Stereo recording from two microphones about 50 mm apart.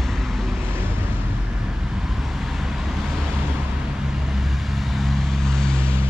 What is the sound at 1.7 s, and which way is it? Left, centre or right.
Vehicle, centre.